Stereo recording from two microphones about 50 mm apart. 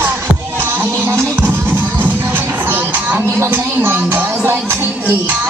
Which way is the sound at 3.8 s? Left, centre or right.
Right.